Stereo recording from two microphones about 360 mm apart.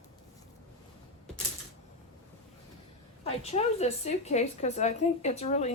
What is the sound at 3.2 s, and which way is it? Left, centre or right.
A woman's voice, centre.